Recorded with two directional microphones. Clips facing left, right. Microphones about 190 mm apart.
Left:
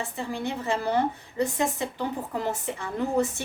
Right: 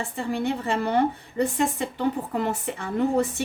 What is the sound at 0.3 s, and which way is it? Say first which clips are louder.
A woman's voice: right 4 dB; 60° right (ahead or behind).